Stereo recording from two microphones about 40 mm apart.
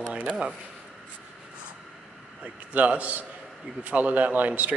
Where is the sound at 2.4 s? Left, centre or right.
Right.